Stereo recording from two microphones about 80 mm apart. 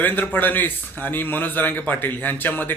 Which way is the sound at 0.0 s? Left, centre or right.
Left.